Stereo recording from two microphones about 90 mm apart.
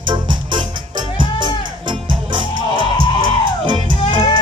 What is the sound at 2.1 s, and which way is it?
Music, 65° right (ahead or behind).